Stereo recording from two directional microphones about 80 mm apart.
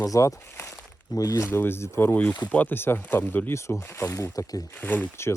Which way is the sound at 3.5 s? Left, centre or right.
Left.